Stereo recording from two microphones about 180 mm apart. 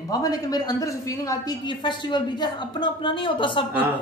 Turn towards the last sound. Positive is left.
turn(degrees=25)  # may be behind; listen again after turning